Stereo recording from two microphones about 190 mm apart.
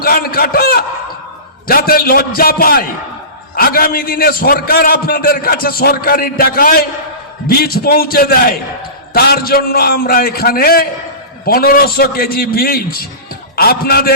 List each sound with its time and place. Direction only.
0.0 s a man's voice: 50° left (ahead or behind)